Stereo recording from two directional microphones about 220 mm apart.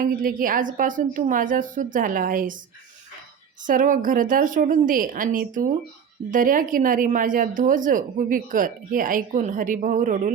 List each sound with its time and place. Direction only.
0.0 s speech: 40° right (ahead or behind)
3.7 s speech: 40° right (ahead or behind)